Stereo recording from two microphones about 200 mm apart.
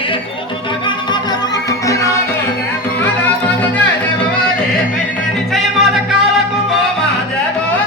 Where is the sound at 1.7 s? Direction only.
15° left (ahead or behind).